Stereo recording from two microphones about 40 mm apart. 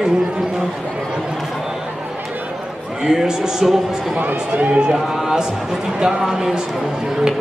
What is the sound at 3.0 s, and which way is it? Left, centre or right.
Speech, centre.